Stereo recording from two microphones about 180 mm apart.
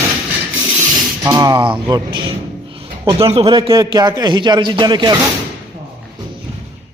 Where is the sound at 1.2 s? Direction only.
20° right (ahead or behind).